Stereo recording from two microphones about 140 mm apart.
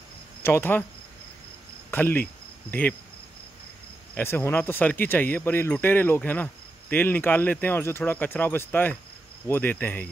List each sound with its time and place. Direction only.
0.4 s speech: 15° left (ahead or behind)
1.9 s cricket: 15° left (ahead or behind)
2.7 s speech: 15° left (ahead or behind)
4.1 s speech: 15° left (ahead or behind)